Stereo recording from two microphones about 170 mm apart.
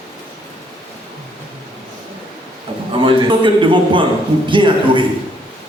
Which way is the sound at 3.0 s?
30° right (ahead or behind).